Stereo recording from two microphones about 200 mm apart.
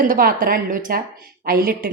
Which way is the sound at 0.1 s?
45° right (ahead or behind).